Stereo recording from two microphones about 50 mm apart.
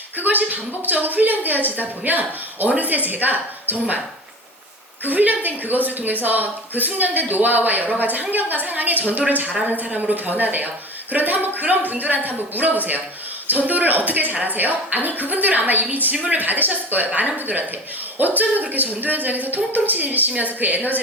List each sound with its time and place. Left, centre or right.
0.2 s speech: right
5.0 s speech: right